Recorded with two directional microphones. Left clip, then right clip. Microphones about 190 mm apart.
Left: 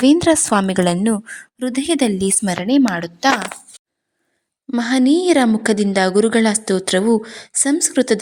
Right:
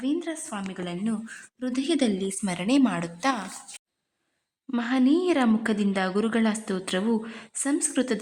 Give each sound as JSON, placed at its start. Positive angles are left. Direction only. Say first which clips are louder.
{"t": 0.0, "sound": "a woman's voice", "louder": "left 16 dB", "side_deg": 55}
{"t": 1.1, "sound": "a woman's voice", "louder": "left 11 dB", "side_deg": 45}
{"t": 2.6, "sound": "a woman's voice", "louder": "left 6 dB", "side_deg": 20}
{"t": 4.8, "sound": "a woman's voice", "louder": "left 8 dB", "side_deg": 25}